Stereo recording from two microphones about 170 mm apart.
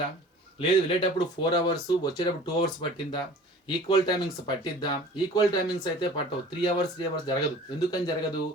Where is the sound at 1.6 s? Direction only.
25° left (ahead or behind).